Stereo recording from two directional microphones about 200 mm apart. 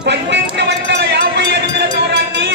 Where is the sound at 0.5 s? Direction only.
60° right (ahead or behind).